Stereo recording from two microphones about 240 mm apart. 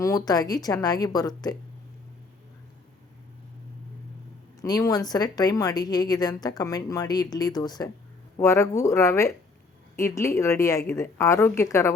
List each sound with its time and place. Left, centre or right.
0.0 s a woman's voice: centre
4.6 s a woman's voice: centre